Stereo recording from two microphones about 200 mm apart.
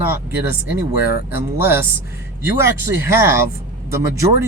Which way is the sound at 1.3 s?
10° right (ahead or behind).